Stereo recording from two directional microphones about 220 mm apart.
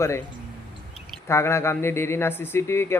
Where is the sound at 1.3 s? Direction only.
10° left (ahead or behind).